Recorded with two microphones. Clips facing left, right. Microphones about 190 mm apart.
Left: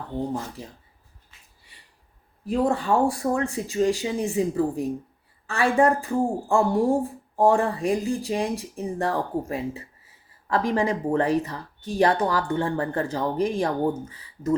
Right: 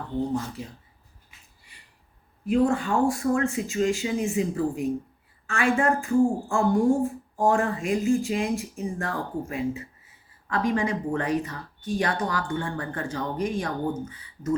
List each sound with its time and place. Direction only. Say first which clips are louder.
2.5 s speech: even; 35° left (ahead or behind)